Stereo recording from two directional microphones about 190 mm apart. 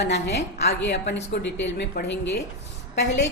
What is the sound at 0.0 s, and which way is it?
A woman's voice, 60° left (ahead or behind).